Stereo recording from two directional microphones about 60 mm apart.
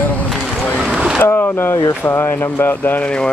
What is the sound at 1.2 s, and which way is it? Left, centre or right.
Speech, left.